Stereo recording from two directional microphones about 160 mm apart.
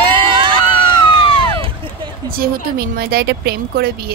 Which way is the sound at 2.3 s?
65° right (ahead or behind).